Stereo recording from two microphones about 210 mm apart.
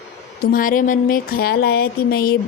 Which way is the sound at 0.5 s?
40° left (ahead or behind).